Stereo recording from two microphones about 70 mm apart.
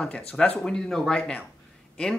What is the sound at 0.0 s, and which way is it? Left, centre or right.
Speech, centre.